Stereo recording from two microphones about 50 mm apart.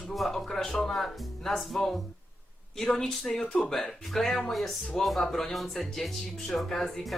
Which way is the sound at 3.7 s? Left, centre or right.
Centre.